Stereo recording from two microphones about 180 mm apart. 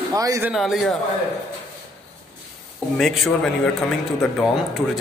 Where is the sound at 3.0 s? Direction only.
Centre (ahead or behind).